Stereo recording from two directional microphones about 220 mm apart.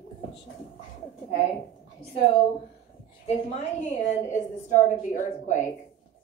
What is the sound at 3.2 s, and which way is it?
A woman's voice, 30° left (ahead or behind).